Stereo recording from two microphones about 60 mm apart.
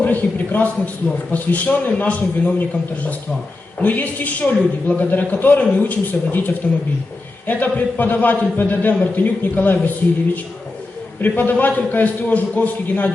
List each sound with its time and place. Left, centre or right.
0.0 s a man's voice: left
11.2 s a man's voice: left